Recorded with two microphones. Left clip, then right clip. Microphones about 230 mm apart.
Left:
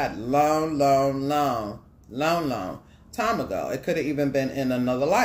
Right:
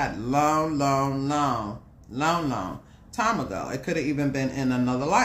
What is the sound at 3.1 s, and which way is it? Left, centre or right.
Speech, centre.